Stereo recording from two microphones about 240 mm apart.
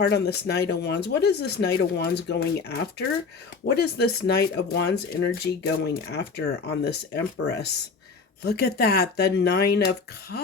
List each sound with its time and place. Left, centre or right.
0.0 s speech: left